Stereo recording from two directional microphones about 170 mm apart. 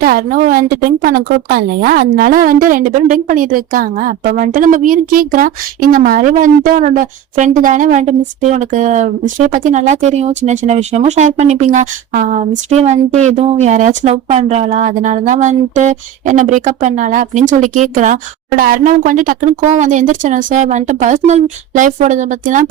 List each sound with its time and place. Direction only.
0.0 s a woman's voice: 60° right (ahead or behind)